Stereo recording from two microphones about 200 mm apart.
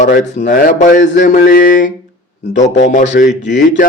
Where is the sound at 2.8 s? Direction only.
35° left (ahead or behind).